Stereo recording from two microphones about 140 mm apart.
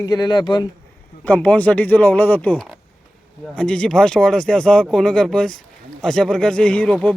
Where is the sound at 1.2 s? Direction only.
10° left (ahead or behind).